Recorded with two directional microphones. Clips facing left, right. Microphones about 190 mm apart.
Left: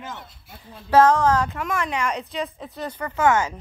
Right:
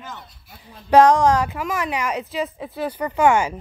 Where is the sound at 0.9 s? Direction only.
15° right (ahead or behind).